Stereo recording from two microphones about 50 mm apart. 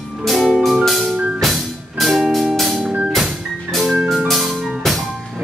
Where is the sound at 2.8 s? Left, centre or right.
Centre.